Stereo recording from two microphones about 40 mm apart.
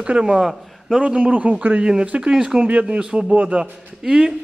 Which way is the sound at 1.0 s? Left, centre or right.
Right.